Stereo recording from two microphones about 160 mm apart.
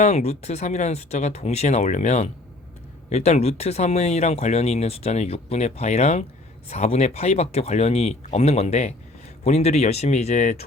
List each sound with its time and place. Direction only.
0.0 s speech: 45° left (ahead or behind)